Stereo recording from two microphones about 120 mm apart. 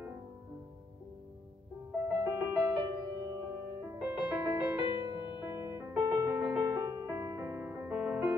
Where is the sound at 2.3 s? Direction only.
15° right (ahead or behind).